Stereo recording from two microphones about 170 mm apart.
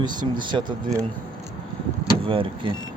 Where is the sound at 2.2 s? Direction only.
30° right (ahead or behind).